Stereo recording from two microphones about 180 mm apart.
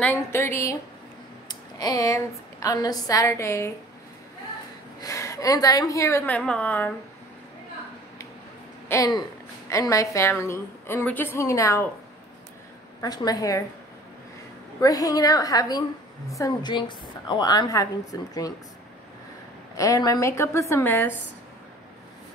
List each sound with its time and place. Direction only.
0.0 s a woman's voice: 10° left (ahead or behind)
5.0 s a woman's voice: 15° left (ahead or behind)
8.8 s a woman's voice: 20° left (ahead or behind)
13.0 s a woman's voice: 20° left (ahead or behind)
14.8 s a woman's voice: 20° left (ahead or behind)
19.8 s a woman's voice: 20° left (ahead or behind)